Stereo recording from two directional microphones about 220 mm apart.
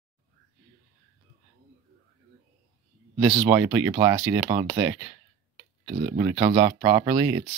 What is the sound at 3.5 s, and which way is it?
Speech, 10° right (ahead or behind).